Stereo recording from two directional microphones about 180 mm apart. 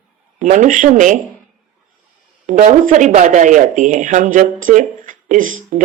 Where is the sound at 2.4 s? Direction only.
40° right (ahead or behind).